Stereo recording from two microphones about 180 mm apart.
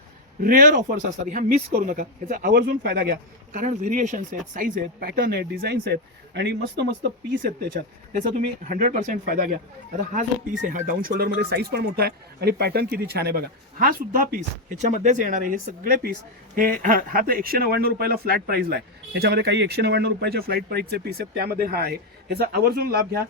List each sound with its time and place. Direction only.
0.4 s speech: 50° right (ahead or behind)
8.6 s speech: 45° right (ahead or behind)
10.7 s speech: 50° right (ahead or behind)